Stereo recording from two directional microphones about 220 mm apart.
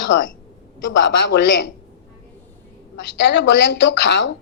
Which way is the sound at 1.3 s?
55° left (ahead or behind).